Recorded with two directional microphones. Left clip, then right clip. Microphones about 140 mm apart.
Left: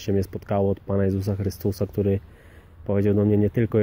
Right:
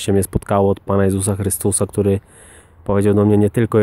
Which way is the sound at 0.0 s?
50° right (ahead or behind).